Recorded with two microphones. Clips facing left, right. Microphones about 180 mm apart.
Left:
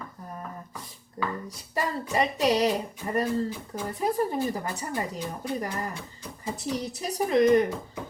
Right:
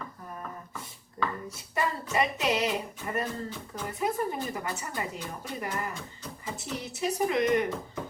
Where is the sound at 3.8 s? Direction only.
35° left (ahead or behind).